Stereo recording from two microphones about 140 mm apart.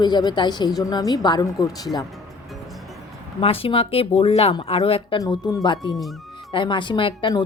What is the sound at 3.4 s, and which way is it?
Speech, 40° left (ahead or behind).